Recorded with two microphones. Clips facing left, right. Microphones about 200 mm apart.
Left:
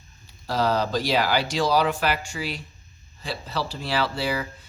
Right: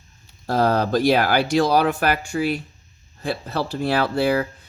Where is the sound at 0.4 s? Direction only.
50° right (ahead or behind).